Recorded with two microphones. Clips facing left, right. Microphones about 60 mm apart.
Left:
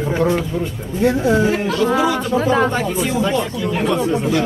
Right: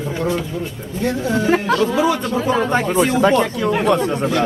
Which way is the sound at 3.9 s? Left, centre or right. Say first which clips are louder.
Even; right.